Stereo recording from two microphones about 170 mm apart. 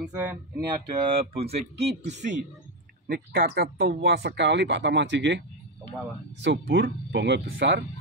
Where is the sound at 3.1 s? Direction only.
65° right (ahead or behind); by 5.4 s 90° right.